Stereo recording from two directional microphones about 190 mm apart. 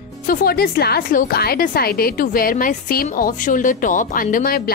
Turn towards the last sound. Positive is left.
turn(degrees=45)  # may be behind; listen again after turning